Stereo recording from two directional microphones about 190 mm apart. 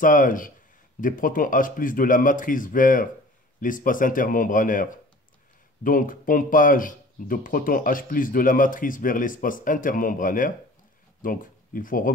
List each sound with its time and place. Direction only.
0.0 s speech: 45° left (ahead or behind)
5.9 s speech: 45° left (ahead or behind)